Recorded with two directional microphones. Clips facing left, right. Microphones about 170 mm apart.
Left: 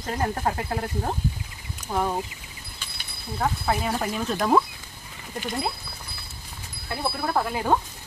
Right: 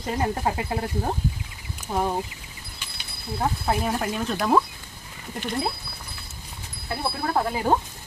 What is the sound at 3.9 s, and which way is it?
Speech, centre (ahead or behind).